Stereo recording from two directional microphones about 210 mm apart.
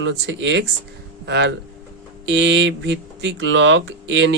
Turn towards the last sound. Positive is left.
turn(degrees=-60)  # may be behind; listen again after turning